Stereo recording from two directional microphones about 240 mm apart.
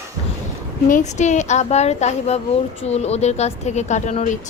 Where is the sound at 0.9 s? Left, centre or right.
Left.